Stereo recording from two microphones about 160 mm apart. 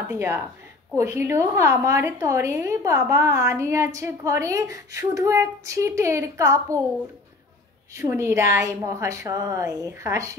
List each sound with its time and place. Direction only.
0.1 s a woman's voice: 15° right (ahead or behind)
7.9 s a woman's voice: 15° right (ahead or behind)